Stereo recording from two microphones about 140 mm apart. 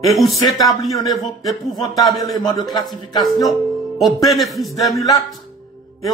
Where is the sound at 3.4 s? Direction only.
Centre (ahead or behind).